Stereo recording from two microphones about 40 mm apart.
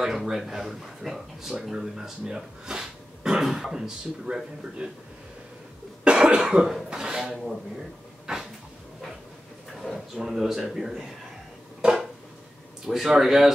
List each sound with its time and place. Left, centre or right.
0.0 s speech: centre
4.8 s speech: right
6.0 s cough: right
6.9 s a sound: centre
9.8 s a sound: centre
10.1 s speech: centre
12.8 s speech: centre